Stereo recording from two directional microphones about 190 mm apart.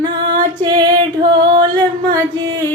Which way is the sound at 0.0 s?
20° right (ahead or behind).